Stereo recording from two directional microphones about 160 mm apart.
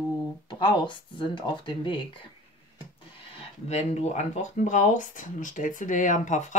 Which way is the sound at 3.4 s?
45° left (ahead or behind).